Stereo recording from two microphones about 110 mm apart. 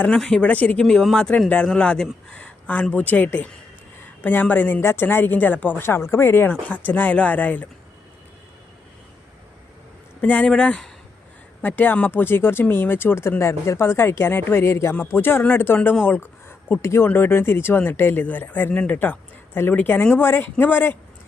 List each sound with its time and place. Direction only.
0.2 s a woman's voice: 5° left (ahead or behind)
10.2 s a woman's voice: 15° left (ahead or behind)